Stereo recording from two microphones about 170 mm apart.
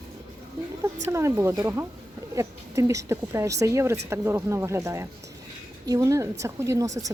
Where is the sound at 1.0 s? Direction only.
15° right (ahead or behind).